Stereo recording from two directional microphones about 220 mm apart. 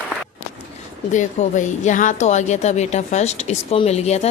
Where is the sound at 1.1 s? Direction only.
35° left (ahead or behind).